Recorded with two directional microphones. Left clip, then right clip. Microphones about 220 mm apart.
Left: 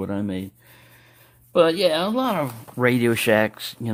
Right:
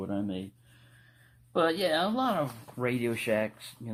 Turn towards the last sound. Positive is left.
turn(degrees=50)  # may be behind; listen again after turning